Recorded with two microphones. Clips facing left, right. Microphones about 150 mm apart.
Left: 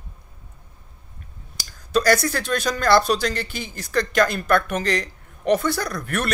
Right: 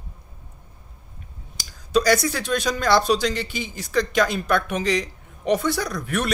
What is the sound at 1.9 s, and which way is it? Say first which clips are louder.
Speech: even; 15° right (ahead or behind).